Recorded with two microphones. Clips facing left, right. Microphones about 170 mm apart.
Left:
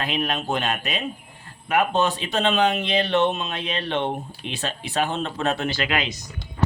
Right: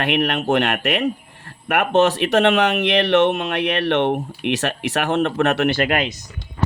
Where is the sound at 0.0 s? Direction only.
70° right (ahead or behind).